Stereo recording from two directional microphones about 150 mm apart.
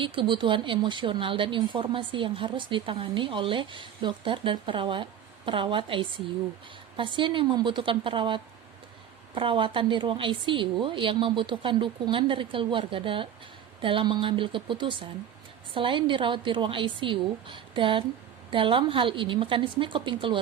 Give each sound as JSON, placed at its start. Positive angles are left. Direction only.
{"t": 0.0, "sound": "speech", "side_deg": -35}